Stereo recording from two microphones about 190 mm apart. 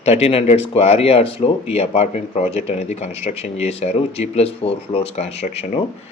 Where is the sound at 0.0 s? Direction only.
35° left (ahead or behind).